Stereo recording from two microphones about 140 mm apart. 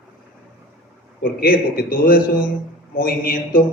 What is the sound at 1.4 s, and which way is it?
A man's voice, 90° left.